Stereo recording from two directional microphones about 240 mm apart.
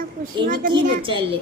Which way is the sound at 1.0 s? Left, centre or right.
Right.